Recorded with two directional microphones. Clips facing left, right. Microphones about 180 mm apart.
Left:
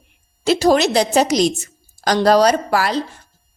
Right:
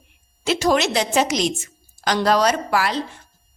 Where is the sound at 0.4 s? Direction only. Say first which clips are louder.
Left 5 dB; 35° left (ahead or behind).